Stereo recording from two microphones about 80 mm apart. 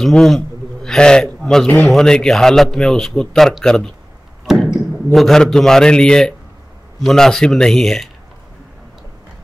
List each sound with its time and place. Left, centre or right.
0.0 s a man's voice: centre